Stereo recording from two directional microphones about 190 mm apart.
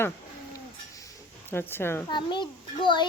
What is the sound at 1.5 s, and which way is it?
Speech, 10° left (ahead or behind).